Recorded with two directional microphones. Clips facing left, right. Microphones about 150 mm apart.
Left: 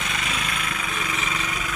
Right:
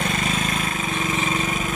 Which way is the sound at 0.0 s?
45° right (ahead or behind).